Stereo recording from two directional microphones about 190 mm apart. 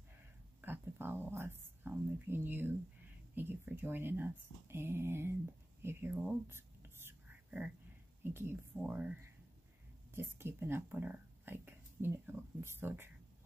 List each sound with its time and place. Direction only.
0.6 s a sound: 10° right (ahead or behind)
3.3 s speech: 10° right (ahead or behind)
5.8 s whispering: 15° right (ahead or behind)
8.2 s speech: 10° right (ahead or behind)